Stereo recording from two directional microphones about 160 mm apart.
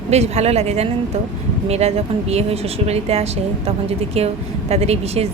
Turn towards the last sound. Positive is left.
turn(degrees=-40)  # may be behind; listen again after turning